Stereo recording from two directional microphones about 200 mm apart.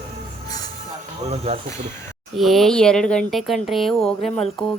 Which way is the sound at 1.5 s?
30° right (ahead or behind).